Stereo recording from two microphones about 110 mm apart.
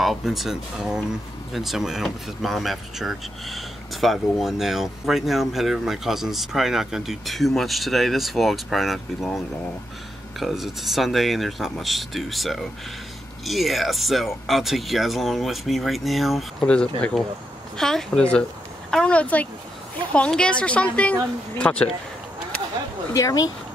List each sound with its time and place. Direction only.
0.0 s speech: centre (ahead or behind)
10.4 s speech: centre (ahead or behind)
23.1 s speech: 30° left (ahead or behind)